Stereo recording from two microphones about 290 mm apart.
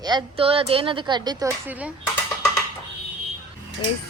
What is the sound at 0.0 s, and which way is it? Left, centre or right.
Speech, centre.